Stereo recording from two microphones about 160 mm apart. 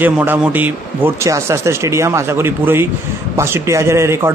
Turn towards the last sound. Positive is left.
turn(degrees=-15)  # may be behind; listen again after turning